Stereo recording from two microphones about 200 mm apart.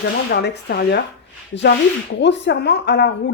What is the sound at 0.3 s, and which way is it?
Speech, 55° left (ahead or behind).